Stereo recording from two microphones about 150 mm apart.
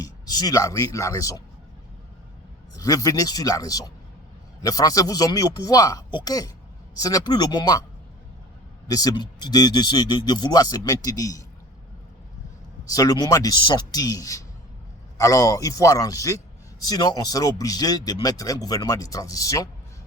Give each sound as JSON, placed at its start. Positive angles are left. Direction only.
{"t": 0.0, "sound": "speech", "side_deg": 25}
{"t": 2.7, "sound": "speech", "side_deg": 25}
{"t": 8.9, "sound": "speech", "side_deg": 25}
{"t": 12.9, "sound": "speech", "side_deg": 25}